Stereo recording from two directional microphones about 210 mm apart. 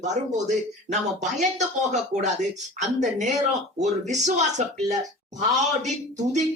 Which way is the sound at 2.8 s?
35° right (ahead or behind).